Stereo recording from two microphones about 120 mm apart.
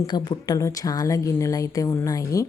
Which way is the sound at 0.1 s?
35° left (ahead or behind).